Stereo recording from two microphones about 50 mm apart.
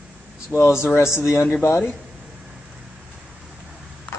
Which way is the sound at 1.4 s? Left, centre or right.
Left.